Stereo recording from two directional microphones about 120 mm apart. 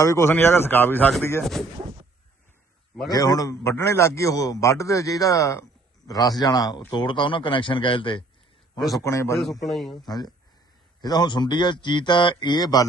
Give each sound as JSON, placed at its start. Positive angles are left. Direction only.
{"t": 0.0, "sound": "speech", "side_deg": 25}
{"t": 3.1, "sound": "a man's voice", "side_deg": 30}
{"t": 9.0, "sound": "a man's voice", "side_deg": 25}
{"t": 9.4, "sound": "a man's voice", "side_deg": 0}
{"t": 10.0, "sound": "a man's voice", "side_deg": 35}